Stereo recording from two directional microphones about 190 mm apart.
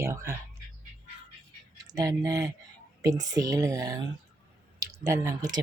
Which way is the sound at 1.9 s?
20° right (ahead or behind).